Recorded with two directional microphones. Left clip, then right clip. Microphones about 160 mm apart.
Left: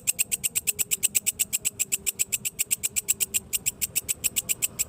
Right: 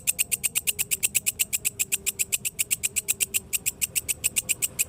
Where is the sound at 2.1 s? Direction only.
15° right (ahead or behind).